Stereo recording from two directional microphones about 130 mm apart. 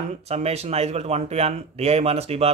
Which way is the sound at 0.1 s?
55° right (ahead or behind).